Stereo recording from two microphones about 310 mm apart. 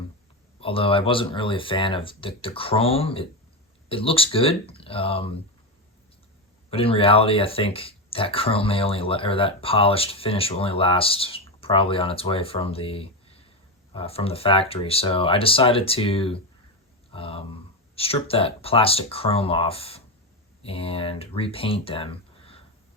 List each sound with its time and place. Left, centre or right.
0.6 s speech: centre
6.7 s speech: centre